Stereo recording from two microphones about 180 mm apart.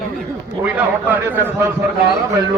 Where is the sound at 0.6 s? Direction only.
10° right (ahead or behind).